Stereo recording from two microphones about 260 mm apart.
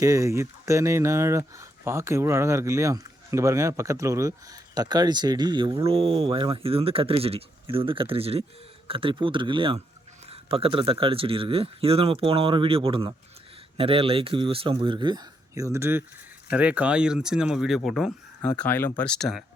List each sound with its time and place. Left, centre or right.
0.0 s speech: centre